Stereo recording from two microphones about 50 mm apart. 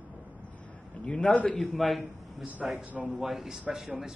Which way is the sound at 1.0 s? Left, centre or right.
Left.